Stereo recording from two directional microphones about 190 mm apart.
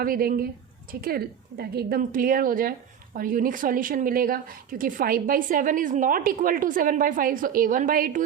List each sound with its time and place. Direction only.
0.0 s a woman's voice: 50° right (ahead or behind)